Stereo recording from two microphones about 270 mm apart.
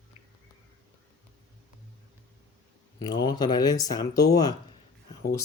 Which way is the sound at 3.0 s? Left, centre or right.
Centre.